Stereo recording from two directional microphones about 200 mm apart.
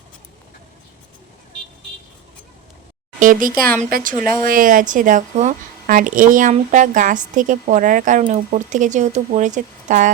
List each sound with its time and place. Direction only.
3.2 s a child's voice: 40° right (ahead or behind)